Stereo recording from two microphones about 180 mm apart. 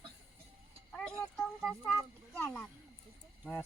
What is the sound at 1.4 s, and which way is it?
Speech, 5° left (ahead or behind).